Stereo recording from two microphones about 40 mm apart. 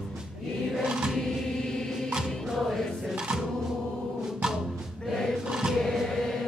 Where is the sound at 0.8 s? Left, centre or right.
Centre.